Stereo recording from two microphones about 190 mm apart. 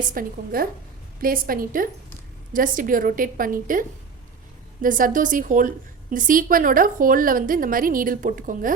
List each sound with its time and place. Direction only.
0.0 s a woman's voice: 45° right (ahead or behind)